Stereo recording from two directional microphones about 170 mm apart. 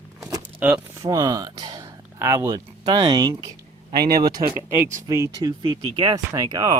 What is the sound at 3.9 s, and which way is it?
Speech, 65° right (ahead or behind).